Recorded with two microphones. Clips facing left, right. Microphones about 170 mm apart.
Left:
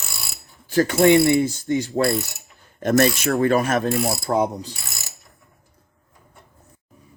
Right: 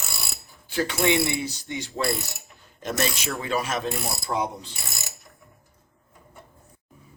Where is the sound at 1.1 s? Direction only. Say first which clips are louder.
Left 10 dB; 55° left (ahead or behind).